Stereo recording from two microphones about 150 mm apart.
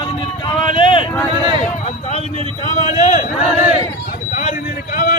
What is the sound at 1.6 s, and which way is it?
Speech, 45° left (ahead or behind).